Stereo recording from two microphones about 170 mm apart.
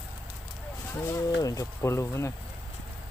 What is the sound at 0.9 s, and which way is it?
Speech, 15° left (ahead or behind).